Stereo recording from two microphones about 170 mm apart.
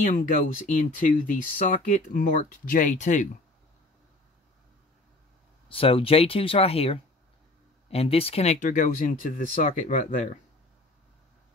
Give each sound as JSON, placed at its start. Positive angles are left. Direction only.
{"t": 0.0, "sound": "speech", "side_deg": 50}
{"t": 5.7, "sound": "speech", "side_deg": 35}